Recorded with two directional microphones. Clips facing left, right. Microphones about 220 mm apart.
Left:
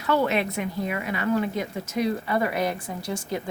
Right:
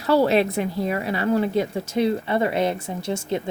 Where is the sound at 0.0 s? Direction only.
35° right (ahead or behind).